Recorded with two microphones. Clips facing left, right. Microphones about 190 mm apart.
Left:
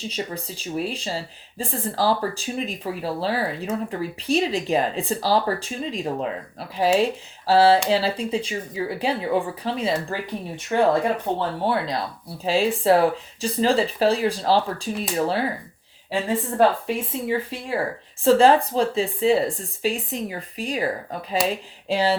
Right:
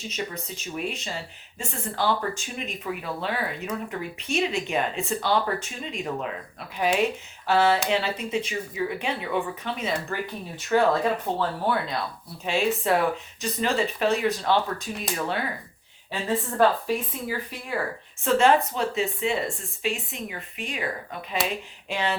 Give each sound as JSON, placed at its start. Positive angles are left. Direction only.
{"t": 0.1, "sound": "speech", "side_deg": 30}
{"t": 16.6, "sound": "speech", "side_deg": 25}